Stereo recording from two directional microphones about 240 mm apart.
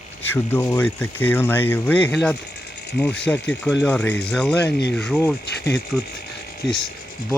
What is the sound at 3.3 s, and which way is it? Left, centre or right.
Speech, left.